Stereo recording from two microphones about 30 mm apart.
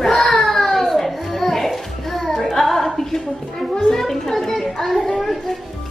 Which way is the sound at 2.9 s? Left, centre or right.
Centre.